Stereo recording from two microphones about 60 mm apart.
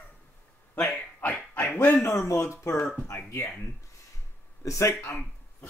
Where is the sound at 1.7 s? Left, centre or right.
Left.